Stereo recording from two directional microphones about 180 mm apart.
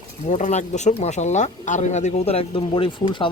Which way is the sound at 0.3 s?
40° left (ahead or behind).